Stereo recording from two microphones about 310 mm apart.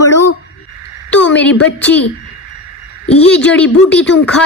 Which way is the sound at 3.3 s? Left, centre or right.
Centre.